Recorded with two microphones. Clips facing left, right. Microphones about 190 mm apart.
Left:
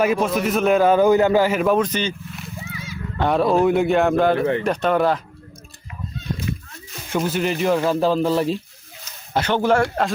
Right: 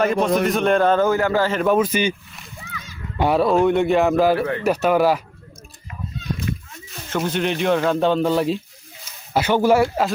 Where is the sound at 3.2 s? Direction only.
5° right (ahead or behind).